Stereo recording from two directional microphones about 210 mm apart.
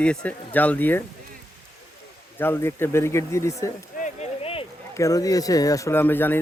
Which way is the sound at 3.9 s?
35° left (ahead or behind).